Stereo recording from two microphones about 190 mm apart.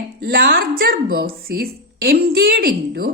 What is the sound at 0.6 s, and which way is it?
A woman's voice, 50° right (ahead or behind).